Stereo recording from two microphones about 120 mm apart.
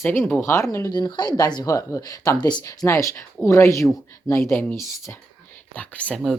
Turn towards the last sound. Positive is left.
turn(degrees=10)  # may be behind; listen again after turning